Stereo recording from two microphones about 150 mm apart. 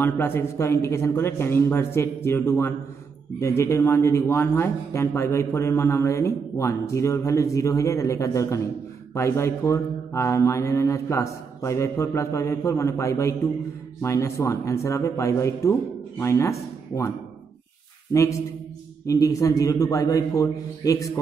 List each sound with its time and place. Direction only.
0.0 s a man's voice: 15° left (ahead or behind)
19.0 s a man's voice: 20° left (ahead or behind)